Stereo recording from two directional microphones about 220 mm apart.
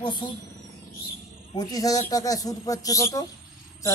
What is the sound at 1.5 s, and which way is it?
Speech, 15° left (ahead or behind).